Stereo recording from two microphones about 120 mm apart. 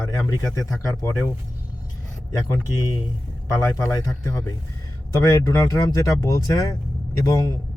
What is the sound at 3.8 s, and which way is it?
Speech, 25° left (ahead or behind).